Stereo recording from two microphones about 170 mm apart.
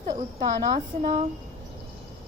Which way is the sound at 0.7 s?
25° right (ahead or behind).